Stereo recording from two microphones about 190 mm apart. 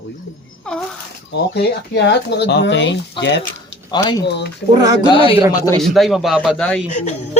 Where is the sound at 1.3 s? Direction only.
60° left (ahead or behind).